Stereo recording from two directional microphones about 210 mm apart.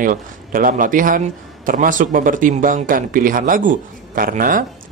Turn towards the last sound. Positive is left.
turn(degrees=-40)  # may be behind; listen again after turning